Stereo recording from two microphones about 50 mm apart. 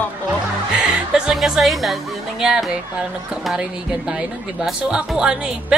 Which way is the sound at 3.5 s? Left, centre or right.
Centre.